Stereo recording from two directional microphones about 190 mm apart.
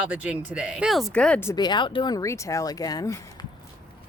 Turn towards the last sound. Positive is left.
turn(degrees=20)  # may be behind; listen again after turning